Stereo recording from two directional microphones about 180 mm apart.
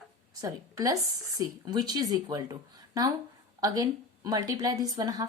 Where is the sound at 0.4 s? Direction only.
20° right (ahead or behind).